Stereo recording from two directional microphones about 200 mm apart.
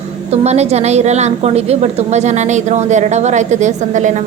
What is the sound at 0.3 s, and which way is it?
A woman's voice, 35° right (ahead or behind).